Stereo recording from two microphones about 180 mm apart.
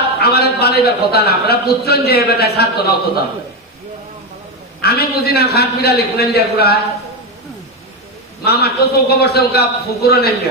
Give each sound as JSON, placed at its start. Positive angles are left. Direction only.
{"t": 0.2, "sound": "a man's voice", "side_deg": 60}
{"t": 4.8, "sound": "a man's voice", "side_deg": 60}
{"t": 8.5, "sound": "a man's voice", "side_deg": 60}